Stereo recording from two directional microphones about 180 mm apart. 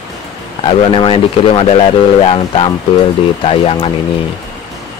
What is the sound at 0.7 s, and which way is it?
Speech, 30° left (ahead or behind).